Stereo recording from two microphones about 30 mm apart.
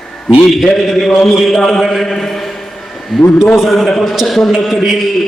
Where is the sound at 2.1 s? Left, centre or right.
Centre.